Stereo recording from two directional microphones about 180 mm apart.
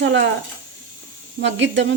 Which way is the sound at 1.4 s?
90° right.